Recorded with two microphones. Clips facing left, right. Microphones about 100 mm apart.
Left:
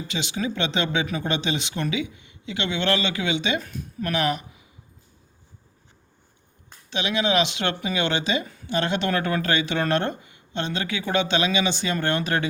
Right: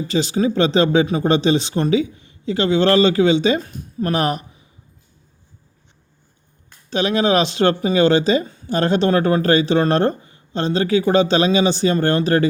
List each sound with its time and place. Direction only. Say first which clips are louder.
0.1 s speech: right 10 dB; 40° right (ahead or behind)
6.9 s speech: right 6 dB; 40° right (ahead or behind)